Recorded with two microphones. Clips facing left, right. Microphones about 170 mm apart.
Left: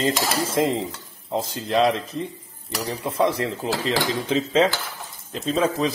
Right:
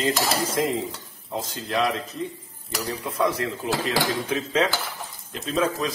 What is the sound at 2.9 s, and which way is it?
Speech, 25° left (ahead or behind).